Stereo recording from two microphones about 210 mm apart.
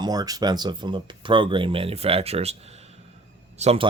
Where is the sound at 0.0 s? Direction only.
20° right (ahead or behind).